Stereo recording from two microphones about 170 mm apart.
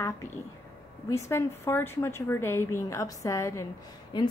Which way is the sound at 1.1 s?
15° left (ahead or behind).